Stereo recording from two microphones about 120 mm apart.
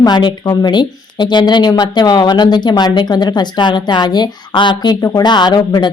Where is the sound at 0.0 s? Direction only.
40° left (ahead or behind).